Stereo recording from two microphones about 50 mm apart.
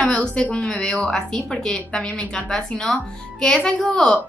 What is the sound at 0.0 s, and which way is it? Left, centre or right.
A woman's voice, left.